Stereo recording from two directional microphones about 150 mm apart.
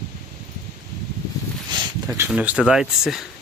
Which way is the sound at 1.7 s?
30° right (ahead or behind).